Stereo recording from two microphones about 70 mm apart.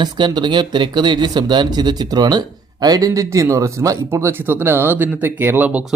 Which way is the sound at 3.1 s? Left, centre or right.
Right.